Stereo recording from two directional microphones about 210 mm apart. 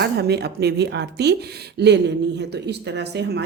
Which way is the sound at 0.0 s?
50° right (ahead or behind).